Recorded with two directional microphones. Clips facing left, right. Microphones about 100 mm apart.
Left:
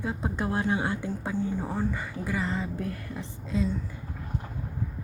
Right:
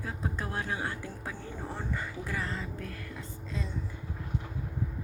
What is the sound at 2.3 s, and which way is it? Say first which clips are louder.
Speech: left 7 dB; 15° left (ahead or behind).